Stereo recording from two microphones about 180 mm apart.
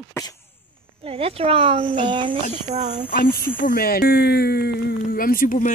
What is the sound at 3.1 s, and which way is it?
Speech, 55° left (ahead or behind).